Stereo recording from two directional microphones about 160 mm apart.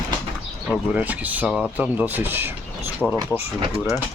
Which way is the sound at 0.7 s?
10° right (ahead or behind).